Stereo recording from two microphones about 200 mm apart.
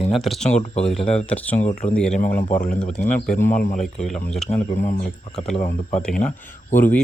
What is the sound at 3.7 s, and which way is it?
Speech, centre (ahead or behind).